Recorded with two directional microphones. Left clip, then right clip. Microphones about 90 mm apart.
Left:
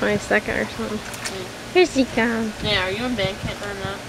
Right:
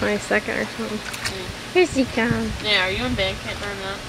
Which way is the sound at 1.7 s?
Centre (ahead or behind).